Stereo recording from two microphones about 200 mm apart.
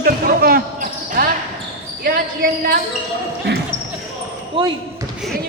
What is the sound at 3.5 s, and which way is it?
Basketball bounce, 55° right (ahead or behind).